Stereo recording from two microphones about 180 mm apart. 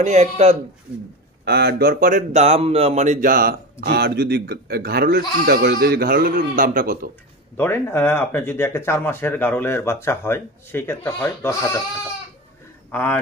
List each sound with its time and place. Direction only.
0.0 s speech: 40° right (ahead or behind)
1.4 s speech: 65° right (ahead or behind)
7.5 s speech: 15° left (ahead or behind)
12.9 s speech: 10° left (ahead or behind)